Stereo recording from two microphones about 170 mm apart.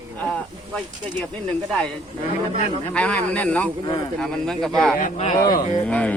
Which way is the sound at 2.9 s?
5° left (ahead or behind).